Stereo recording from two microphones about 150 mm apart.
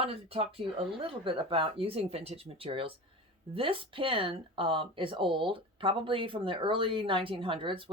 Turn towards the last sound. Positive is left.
turn(degrees=-35)  # may be behind; listen again after turning